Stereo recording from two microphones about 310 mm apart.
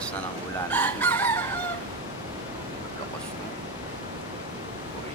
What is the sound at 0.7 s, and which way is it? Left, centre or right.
Chicken, centre.